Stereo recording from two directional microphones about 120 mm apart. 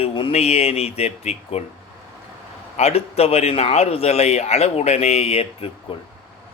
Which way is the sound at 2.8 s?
60° left (ahead or behind).